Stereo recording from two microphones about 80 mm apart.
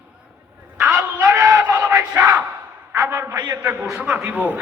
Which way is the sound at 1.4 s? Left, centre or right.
Right.